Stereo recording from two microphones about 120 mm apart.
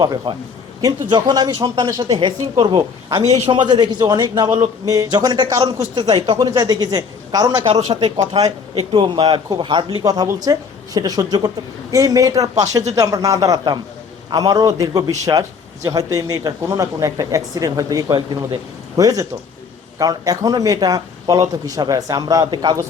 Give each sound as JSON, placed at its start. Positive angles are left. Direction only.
{"t": 0.0, "sound": "a man's voice", "side_deg": -35}
{"t": 8.7, "sound": "a man's voice", "side_deg": -50}